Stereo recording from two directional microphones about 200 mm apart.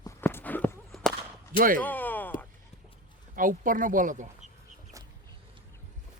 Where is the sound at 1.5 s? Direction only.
45° right (ahead or behind).